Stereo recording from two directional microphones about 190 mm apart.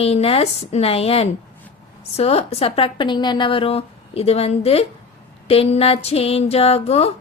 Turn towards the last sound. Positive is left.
turn(degrees=30)  # may be behind; listen again after turning